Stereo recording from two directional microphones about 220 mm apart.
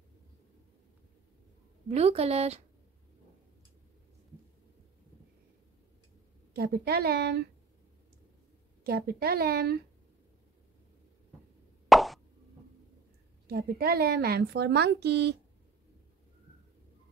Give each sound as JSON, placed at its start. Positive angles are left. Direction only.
{"t": 1.9, "sound": "a woman's voice", "side_deg": -30}
{"t": 6.5, "sound": "speech", "side_deg": -45}
{"t": 8.8, "sound": "speech", "side_deg": -45}
{"t": 11.9, "sound": "plop", "side_deg": 0}
{"t": 13.5, "sound": "speech", "side_deg": -45}